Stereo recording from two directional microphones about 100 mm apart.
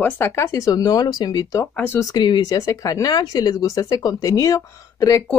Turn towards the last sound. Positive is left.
turn(degrees=35)  # may be behind; listen again after turning